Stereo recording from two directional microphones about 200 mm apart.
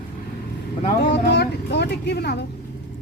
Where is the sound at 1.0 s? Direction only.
60° left (ahead or behind).